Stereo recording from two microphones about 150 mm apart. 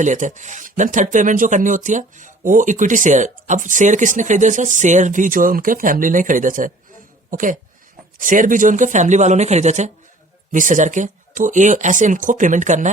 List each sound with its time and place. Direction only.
0.0 s speech: 55° right (ahead or behind)